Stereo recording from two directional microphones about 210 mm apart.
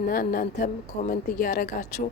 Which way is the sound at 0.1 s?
40° left (ahead or behind).